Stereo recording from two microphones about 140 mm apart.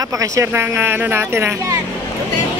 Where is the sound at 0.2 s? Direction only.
20° right (ahead or behind).